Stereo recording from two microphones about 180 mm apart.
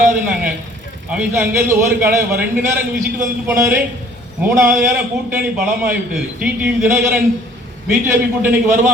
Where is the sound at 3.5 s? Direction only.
15° right (ahead or behind).